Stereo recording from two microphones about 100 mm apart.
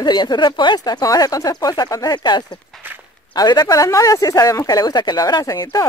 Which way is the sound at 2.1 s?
50° left (ahead or behind).